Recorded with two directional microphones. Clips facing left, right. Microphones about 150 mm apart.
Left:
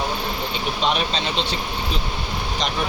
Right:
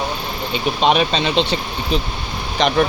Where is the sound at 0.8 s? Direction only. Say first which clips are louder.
Right 7 dB; 70° right (ahead or behind).